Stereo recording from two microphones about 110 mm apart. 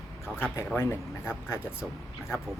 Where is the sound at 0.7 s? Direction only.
20° left (ahead or behind).